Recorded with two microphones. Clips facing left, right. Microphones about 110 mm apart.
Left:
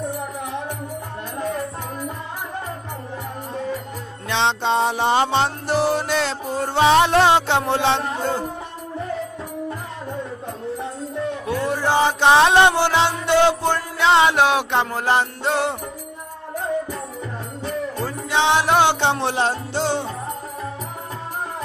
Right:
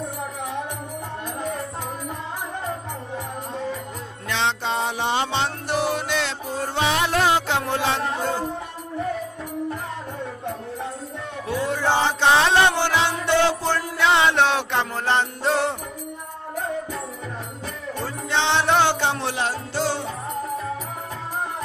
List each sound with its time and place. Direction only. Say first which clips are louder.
4.3 s music: left 4 dB; 20° left (ahead or behind)
11.6 s music: left 2 dB; 15° left (ahead or behind)
18.0 s music: left 3 dB; 10° left (ahead or behind)
18.9 s music: left 4 dB; 25° left (ahead or behind)